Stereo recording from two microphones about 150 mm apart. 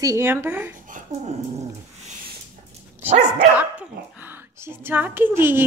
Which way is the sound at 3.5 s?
10° right (ahead or behind).